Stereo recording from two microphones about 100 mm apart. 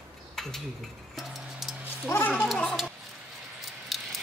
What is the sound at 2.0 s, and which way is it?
Speech, 25° left (ahead or behind).